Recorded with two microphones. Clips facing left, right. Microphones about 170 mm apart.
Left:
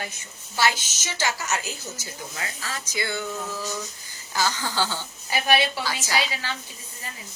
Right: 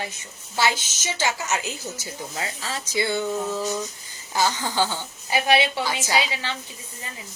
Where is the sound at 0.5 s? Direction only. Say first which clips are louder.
Right 1 dB; 20° right (ahead or behind).